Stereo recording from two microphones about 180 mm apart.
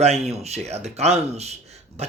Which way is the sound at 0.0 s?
35° right (ahead or behind).